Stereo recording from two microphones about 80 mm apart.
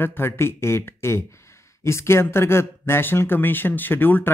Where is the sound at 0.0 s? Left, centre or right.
Left.